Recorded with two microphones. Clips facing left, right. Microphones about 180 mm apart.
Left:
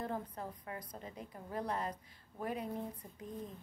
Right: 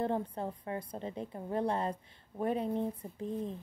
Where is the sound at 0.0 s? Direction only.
30° right (ahead or behind).